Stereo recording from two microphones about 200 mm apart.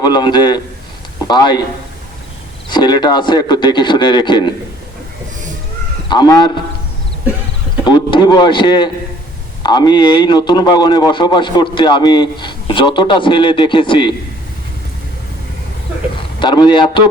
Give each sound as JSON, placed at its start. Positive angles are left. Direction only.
{"t": 0.0, "sound": "a man's voice", "side_deg": 20}
{"t": 2.6, "sound": "a man's voice", "side_deg": 20}
{"t": 6.1, "sound": "a man's voice", "side_deg": 20}
{"t": 7.9, "sound": "a man's voice", "side_deg": 20}
{"t": 16.4, "sound": "a man's voice", "side_deg": 20}